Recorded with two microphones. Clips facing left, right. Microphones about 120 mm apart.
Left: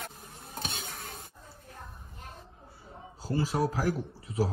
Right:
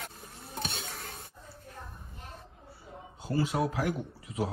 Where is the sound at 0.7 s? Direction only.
Centre (ahead or behind).